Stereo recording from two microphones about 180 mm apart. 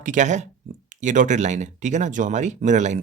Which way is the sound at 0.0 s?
45° right (ahead or behind).